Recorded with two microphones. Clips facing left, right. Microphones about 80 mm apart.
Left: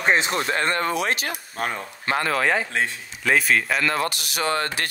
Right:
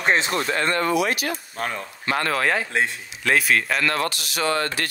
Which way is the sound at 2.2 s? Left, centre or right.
Centre.